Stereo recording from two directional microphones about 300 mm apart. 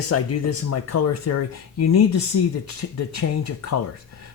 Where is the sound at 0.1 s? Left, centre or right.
Left.